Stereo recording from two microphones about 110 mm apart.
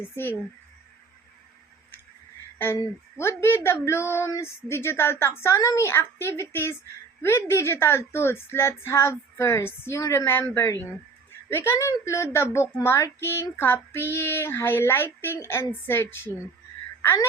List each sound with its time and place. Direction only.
2.7 s speech: 20° left (ahead or behind)